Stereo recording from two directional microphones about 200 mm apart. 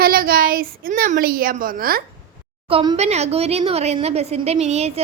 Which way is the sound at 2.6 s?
30° right (ahead or behind).